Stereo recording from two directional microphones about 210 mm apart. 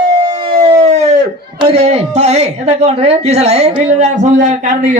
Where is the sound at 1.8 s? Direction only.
30° right (ahead or behind).